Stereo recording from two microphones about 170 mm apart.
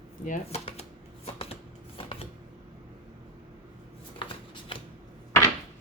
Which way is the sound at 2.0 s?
30° left (ahead or behind).